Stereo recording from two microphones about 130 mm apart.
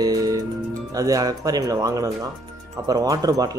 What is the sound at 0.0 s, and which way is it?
Music, 30° right (ahead or behind).